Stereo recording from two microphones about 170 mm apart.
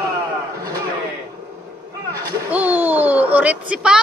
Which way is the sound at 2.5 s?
10° right (ahead or behind).